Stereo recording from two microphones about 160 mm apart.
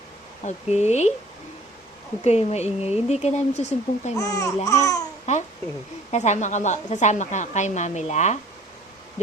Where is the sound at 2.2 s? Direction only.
45° left (ahead or behind).